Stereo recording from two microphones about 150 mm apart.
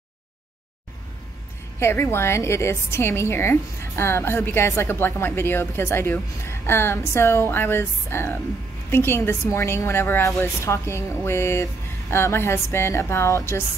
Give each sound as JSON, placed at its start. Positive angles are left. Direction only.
{"t": 1.8, "sound": "a woman's voice", "side_deg": 15}